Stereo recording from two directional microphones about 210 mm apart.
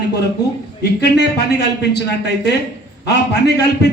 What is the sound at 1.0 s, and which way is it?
A man's voice, 50° left (ahead or behind).